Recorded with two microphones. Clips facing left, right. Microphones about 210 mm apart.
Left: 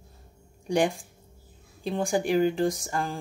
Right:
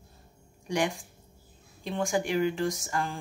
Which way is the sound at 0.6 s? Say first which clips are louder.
Left 4 dB; 30° left (ahead or behind).